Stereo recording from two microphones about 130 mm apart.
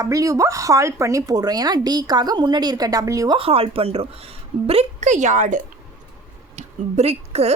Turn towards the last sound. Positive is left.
turn(degrees=-55)  # may be behind; listen again after turning